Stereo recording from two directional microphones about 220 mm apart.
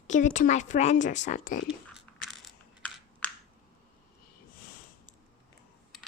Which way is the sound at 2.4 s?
5° left (ahead or behind).